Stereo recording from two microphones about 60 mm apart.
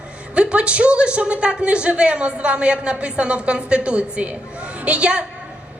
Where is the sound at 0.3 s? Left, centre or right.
Centre.